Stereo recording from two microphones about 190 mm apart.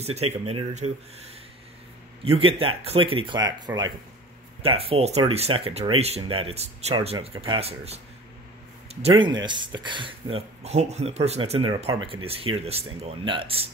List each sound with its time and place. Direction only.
0.0 s speech: 35° right (ahead or behind)
9.2 s speech: 25° right (ahead or behind)